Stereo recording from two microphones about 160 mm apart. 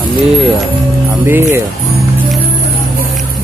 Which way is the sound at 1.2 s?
15° right (ahead or behind).